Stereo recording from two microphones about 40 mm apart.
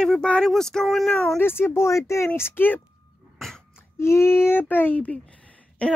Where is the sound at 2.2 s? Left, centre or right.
Left.